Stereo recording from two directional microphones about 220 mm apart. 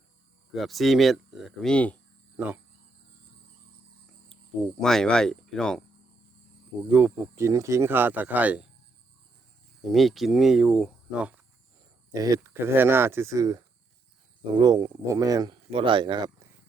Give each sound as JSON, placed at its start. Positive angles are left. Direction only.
{"t": 0.5, "sound": "speech", "side_deg": 0}
{"t": 4.8, "sound": "speech", "side_deg": 0}
{"t": 6.9, "sound": "speech", "side_deg": -10}
{"t": 9.8, "sound": "speech", "side_deg": 0}
{"t": 12.1, "sound": "speech", "side_deg": -15}